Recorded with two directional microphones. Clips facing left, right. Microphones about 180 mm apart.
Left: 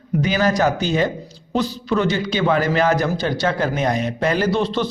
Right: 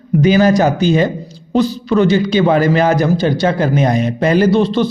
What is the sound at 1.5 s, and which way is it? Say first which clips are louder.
Speech: right 7 dB; 35° right (ahead or behind).